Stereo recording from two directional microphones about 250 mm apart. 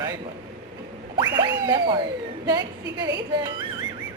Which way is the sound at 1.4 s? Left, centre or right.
Centre.